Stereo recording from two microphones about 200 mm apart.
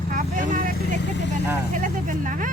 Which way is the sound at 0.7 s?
60° left (ahead or behind).